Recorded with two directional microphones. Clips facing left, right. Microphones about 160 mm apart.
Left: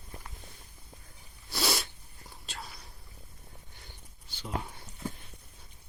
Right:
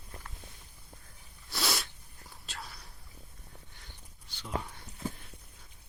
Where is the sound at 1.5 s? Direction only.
Centre (ahead or behind).